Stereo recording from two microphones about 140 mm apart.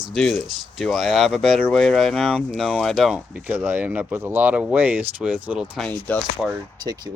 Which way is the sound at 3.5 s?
15° right (ahead or behind).